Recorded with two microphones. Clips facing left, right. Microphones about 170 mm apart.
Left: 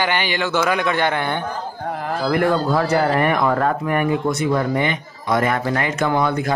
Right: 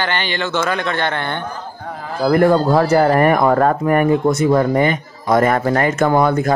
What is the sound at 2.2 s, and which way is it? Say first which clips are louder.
Speech: right 6 dB; 40° right (ahead or behind).